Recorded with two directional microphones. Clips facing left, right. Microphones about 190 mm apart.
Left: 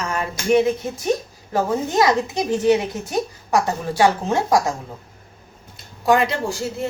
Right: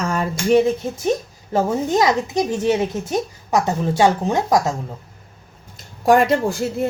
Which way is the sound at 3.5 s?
20° right (ahead or behind).